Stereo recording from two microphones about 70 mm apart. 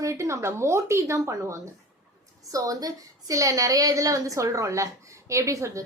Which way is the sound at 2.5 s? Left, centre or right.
Right.